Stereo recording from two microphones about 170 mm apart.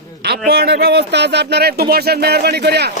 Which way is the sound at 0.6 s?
70° right (ahead or behind).